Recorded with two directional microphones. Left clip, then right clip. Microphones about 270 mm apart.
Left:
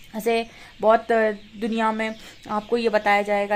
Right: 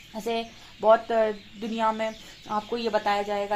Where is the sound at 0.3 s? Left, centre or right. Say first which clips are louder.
Left 7 dB; left.